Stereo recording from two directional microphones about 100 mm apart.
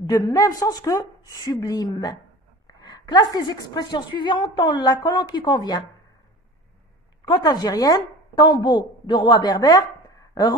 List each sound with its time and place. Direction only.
0.0 s a woman's voice: 40° left (ahead or behind)
7.2 s a woman's voice: 40° left (ahead or behind)